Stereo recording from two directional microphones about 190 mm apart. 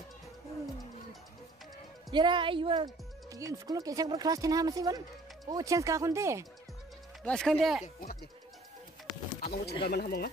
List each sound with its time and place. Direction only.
2.0 s speech: 25° right (ahead or behind)
7.2 s speech: centre (ahead or behind)
7.8 s speech: 50° left (ahead or behind)
9.4 s bird: 55° left (ahead or behind)
9.8 s speech: 55° left (ahead or behind)